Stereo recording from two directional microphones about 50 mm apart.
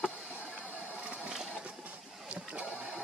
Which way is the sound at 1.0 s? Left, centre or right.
Right.